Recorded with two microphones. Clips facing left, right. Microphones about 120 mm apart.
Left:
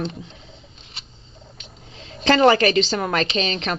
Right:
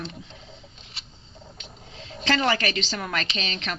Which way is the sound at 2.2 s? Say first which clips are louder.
Left 9 dB; 45° left (ahead or behind).